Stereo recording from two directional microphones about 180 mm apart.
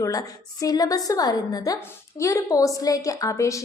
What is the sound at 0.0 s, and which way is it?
A woman's voice, 20° left (ahead or behind).